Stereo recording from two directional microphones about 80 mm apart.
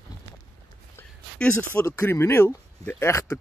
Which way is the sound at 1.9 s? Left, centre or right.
Left.